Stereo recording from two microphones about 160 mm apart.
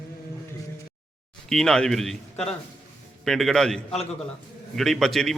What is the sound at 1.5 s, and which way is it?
A man's voice, 5° left (ahead or behind).